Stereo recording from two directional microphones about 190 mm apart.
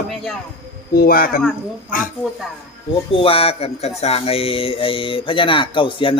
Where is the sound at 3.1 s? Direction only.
30° left (ahead or behind).